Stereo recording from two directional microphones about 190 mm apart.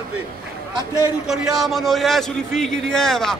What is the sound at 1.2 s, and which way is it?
A man's voice, centre (ahead or behind).